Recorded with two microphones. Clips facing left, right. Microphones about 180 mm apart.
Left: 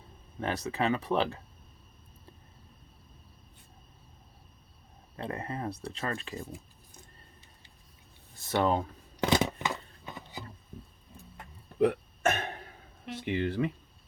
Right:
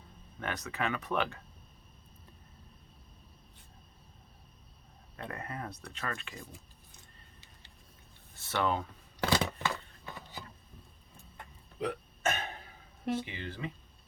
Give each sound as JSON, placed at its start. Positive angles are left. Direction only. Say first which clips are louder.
{"t": 0.3, "sound": "speech", "louder": "left 5 dB", "side_deg": 30}
{"t": 5.1, "sound": "speech", "louder": "left 5 dB", "side_deg": 30}
{"t": 8.4, "sound": "speech", "louder": "left 4 dB", "side_deg": 35}
{"t": 9.2, "sound": "a sound", "louder": "left 3 dB", "side_deg": 20}
{"t": 11.8, "sound": "burping", "louder": "left 9 dB", "side_deg": 60}
{"t": 13.2, "sound": "speech", "louder": "left 12 dB", "side_deg": 60}